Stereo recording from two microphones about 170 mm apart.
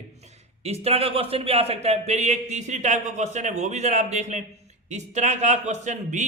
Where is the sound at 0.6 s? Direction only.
35° right (ahead or behind).